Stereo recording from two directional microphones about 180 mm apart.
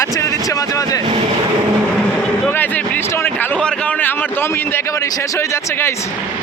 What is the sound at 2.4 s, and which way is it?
A man's voice, 10° left (ahead or behind).